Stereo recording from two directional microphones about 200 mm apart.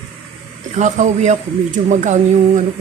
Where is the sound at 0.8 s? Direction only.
35° right (ahead or behind).